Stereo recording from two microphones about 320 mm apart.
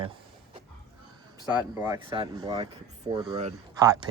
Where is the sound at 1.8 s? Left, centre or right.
Centre.